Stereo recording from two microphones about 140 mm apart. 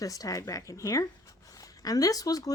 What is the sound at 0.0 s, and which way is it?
Speech, 25° left (ahead or behind).